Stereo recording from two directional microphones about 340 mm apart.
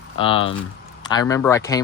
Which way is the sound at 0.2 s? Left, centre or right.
Centre.